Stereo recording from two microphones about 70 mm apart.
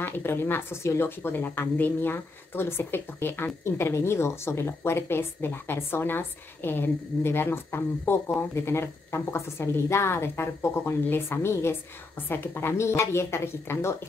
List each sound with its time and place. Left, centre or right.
0.0 s speech: left